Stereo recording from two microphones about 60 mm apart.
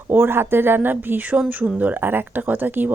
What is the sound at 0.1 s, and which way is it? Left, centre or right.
Speech, right.